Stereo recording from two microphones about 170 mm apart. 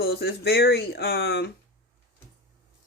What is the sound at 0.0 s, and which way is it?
Speech, 75° left (ahead or behind).